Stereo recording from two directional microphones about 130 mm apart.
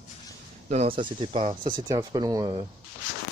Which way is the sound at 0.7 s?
50° right (ahead or behind).